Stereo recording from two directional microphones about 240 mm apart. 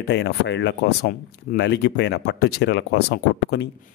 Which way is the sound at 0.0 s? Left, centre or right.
Left.